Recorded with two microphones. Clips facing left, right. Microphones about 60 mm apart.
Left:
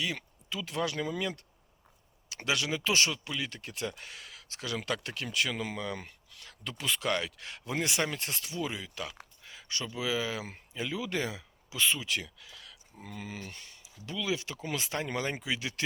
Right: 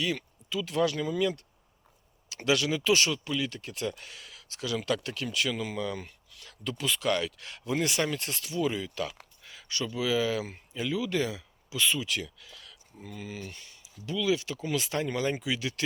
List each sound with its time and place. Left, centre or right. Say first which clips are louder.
0.0 s speech: right 4 dB; centre
8.7 s speech: right 6 dB; centre
13.0 s speech: right 2 dB; left